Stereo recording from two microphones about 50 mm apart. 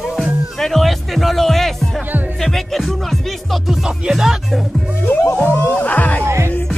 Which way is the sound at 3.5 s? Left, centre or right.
Centre.